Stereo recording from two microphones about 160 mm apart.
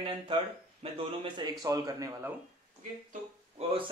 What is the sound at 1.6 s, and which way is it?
Speech, 20° right (ahead or behind).